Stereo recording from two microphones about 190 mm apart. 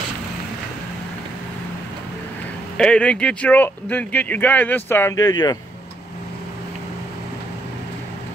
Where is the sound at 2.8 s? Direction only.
5° left (ahead or behind).